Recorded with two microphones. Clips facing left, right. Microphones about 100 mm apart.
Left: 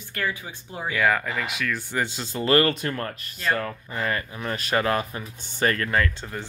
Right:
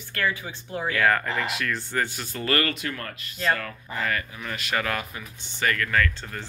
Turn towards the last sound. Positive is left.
turn(degrees=15)  # may be behind; listen again after turning